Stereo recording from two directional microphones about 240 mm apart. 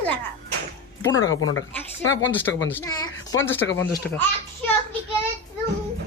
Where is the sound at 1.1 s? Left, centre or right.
Left.